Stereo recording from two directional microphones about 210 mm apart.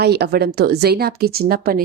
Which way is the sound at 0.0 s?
50° right (ahead or behind).